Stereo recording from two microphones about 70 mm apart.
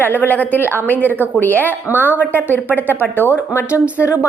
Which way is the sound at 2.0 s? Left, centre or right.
Right.